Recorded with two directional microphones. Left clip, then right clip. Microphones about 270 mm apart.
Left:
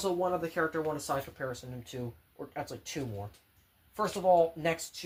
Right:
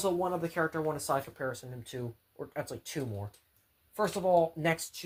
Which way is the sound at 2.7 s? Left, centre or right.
Right.